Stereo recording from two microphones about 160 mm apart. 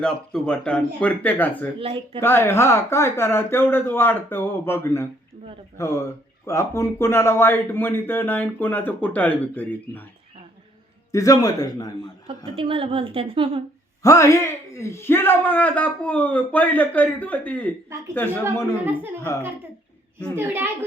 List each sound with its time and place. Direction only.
0.0 s speech: 5° left (ahead or behind)
1.8 s a woman's voice: 35° right (ahead or behind)
2.2 s speech: 15° left (ahead or behind)
11.1 s a man's voice: 20° left (ahead or behind)
12.5 s a woman's voice: 35° right (ahead or behind)
14.0 s speech: 20° left (ahead or behind)
20.3 s a child's voice: 15° right (ahead or behind)